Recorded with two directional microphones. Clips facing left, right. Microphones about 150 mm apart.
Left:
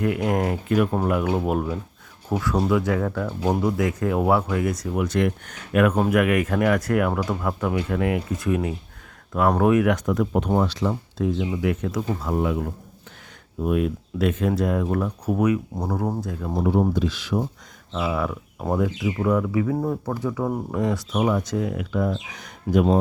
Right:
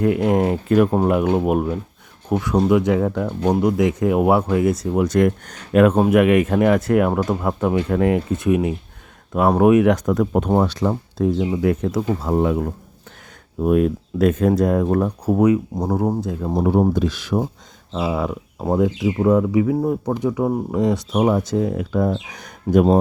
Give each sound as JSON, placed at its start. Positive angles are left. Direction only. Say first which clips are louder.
{"t": 0.0, "sound": "speech", "louder": "right 5 dB", "side_deg": -25}
{"t": 0.7, "sound": "speech", "louder": "right 5 dB", "side_deg": -35}
{"t": 5.0, "sound": "speech", "louder": "right 6 dB", "side_deg": -45}
{"t": 5.7, "sound": "speech", "louder": "right 5 dB", "side_deg": -30}
{"t": 8.4, "sound": "speech", "louder": "right 6 dB", "side_deg": -20}
{"t": 9.9, "sound": "speech", "louder": "right 4 dB", "side_deg": -45}
{"t": 15.3, "sound": "speech", "louder": "right 5 dB", "side_deg": -25}
{"t": 16.6, "sound": "speech", "louder": "right 4 dB", "side_deg": -50}
{"t": 17.9, "sound": "speech", "louder": "right 3 dB", "side_deg": -25}
{"t": 21.2, "sound": "speech", "louder": "right 5 dB", "side_deg": -35}